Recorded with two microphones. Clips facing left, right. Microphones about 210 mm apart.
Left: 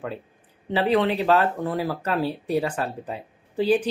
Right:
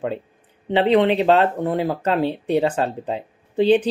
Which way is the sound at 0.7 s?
20° right (ahead or behind).